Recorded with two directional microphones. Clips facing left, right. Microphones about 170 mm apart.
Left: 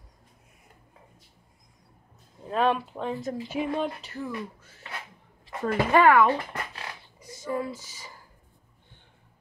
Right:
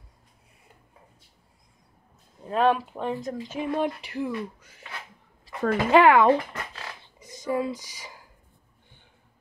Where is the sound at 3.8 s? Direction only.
10° right (ahead or behind).